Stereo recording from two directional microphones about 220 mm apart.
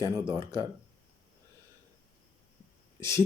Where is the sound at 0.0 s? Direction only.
20° right (ahead or behind).